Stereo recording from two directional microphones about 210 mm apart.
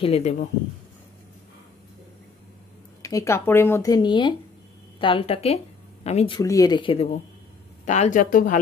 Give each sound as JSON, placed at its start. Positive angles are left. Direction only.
{"t": 0.0, "sound": "speech", "side_deg": 30}
{"t": 3.0, "sound": "speech", "side_deg": 15}
{"t": 6.4, "sound": "speech", "side_deg": 15}
{"t": 7.8, "sound": "speech", "side_deg": 35}